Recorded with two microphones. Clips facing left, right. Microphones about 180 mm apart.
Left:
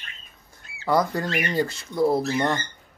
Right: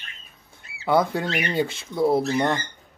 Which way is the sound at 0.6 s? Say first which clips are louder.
Right 2 dB; centre (ahead or behind).